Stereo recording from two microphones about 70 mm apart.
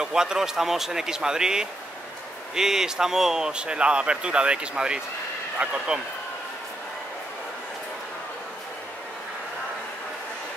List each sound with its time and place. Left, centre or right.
0.0 s a man's voice: centre